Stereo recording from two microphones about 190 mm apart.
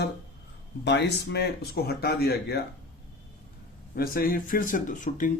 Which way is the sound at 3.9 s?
50° left (ahead or behind).